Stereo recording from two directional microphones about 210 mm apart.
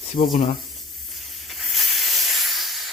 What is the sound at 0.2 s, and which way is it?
Speech, 45° left (ahead or behind).